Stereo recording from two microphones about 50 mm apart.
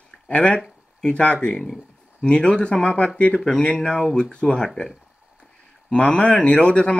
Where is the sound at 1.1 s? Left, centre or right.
Left.